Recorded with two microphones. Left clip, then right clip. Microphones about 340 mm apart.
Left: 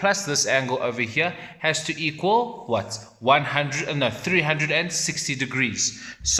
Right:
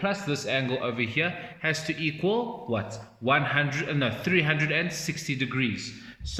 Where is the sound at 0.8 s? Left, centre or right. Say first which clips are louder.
Left 4 dB; centre.